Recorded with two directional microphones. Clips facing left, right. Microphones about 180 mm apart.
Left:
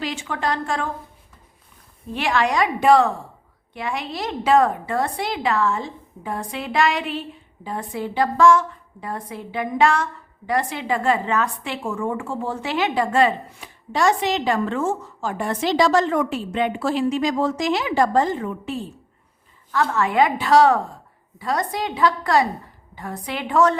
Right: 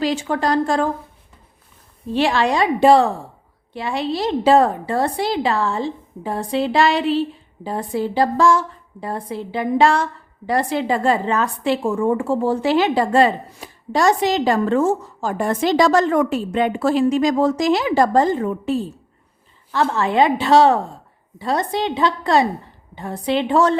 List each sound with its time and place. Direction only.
0.0 s a woman's voice: 35° right (ahead or behind)
2.1 s a woman's voice: 30° right (ahead or behind)